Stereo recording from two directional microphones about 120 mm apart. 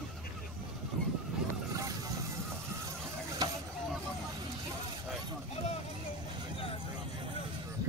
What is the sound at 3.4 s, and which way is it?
Vehicle, 35° right (ahead or behind).